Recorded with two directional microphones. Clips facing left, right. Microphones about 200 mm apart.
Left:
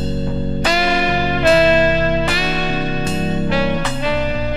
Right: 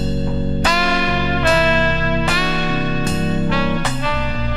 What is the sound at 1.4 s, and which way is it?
Music, 25° left (ahead or behind).